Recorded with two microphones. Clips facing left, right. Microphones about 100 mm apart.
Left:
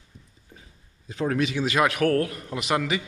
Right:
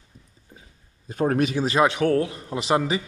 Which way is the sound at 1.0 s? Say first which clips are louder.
Right 3 dB; 45° right (ahead or behind).